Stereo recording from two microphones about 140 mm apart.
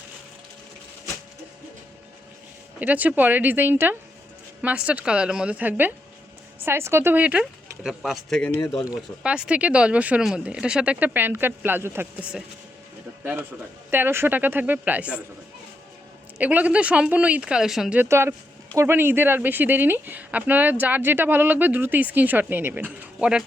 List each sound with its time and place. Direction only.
2.7 s speech: 10° right (ahead or behind); by 8.5 s 5° left (ahead or behind)
9.0 s speech: 5° right (ahead or behind)
13.9 s speech: 15° right (ahead or behind)
16.4 s speech: 10° right (ahead or behind)